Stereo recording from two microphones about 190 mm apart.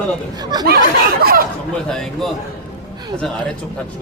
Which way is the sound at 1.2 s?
50° right (ahead or behind).